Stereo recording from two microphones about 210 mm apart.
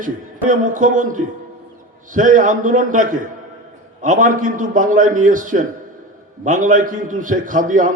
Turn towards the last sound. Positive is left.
turn(degrees=-40)  # may be behind; listen again after turning